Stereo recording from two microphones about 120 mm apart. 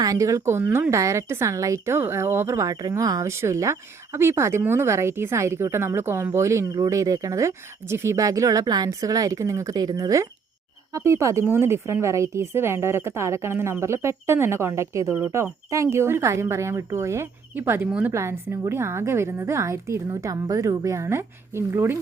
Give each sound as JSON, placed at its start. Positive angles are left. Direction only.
{"t": 0.0, "sound": "a woman's voice", "side_deg": -25}